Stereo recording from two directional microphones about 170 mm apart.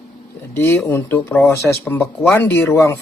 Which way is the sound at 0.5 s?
15° left (ahead or behind).